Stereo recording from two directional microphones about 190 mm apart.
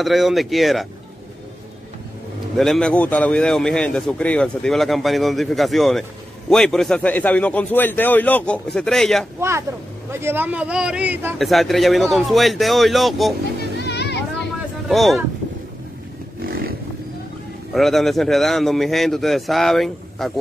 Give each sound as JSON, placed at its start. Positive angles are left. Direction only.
{"t": 0.0, "sound": "a man's voice", "side_deg": 0}
{"t": 2.5, "sound": "a man's voice", "side_deg": 0}
{"t": 9.4, "sound": "a man's voice", "side_deg": -15}
{"t": 13.7, "sound": "a sound", "side_deg": 60}
{"t": 14.9, "sound": "a man's voice", "side_deg": 0}
{"t": 16.3, "sound": "roaring cats", "side_deg": -50}
{"t": 17.7, "sound": "a man's voice", "side_deg": 0}